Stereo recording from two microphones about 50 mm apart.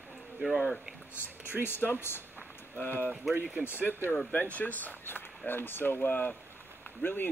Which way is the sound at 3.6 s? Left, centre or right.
Left.